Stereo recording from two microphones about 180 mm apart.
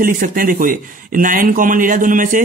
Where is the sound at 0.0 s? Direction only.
50° right (ahead or behind).